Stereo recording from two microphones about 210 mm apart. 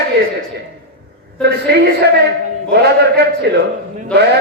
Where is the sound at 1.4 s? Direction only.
50° right (ahead or behind).